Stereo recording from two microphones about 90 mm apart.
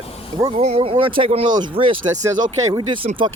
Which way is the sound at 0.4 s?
30° right (ahead or behind).